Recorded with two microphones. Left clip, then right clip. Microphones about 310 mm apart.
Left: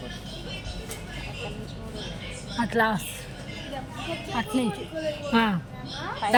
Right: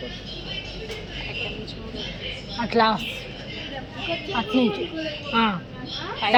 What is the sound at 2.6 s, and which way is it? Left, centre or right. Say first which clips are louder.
Speech: right 4 dB; left.